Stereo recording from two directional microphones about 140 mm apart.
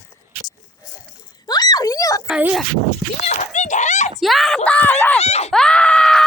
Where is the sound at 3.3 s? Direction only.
60° left (ahead or behind).